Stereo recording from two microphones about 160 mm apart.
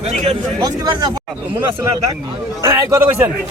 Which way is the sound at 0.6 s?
25° right (ahead or behind).